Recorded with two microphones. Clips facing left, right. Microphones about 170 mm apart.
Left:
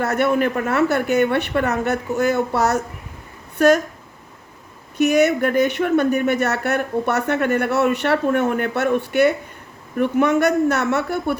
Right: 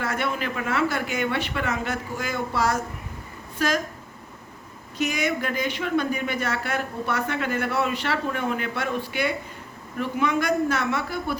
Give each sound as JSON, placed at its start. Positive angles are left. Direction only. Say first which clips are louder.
{"t": 0.0, "sound": "speech", "louder": "left 9 dB", "side_deg": 55}
{"t": 5.0, "sound": "speech", "louder": "left 10 dB", "side_deg": 60}